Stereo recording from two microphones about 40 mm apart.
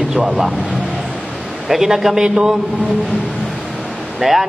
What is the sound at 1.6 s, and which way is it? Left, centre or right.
Speech, centre.